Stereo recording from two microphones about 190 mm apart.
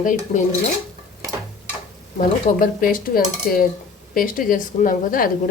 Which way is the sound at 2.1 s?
45° left (ahead or behind).